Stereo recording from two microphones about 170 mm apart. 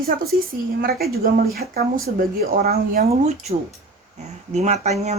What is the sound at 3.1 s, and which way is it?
Speech, 40° right (ahead or behind).